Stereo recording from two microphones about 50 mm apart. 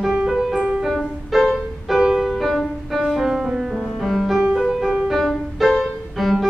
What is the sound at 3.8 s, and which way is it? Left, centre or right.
Music, centre.